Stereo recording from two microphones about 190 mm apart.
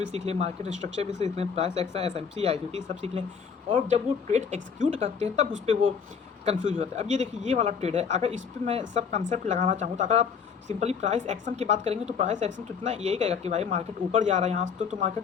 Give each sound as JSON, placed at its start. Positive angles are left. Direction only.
{"t": 0.0, "sound": "speech", "side_deg": -35}